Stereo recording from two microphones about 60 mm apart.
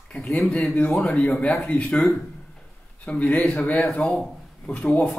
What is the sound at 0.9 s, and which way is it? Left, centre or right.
Speech, centre.